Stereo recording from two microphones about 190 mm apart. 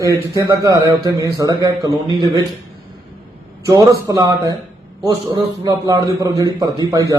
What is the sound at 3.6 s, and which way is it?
A man's voice, 15° right (ahead or behind).